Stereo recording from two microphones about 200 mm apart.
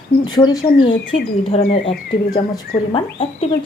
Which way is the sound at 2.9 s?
30° left (ahead or behind).